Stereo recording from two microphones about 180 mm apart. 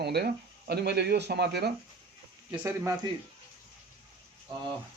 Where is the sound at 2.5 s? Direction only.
15° right (ahead or behind).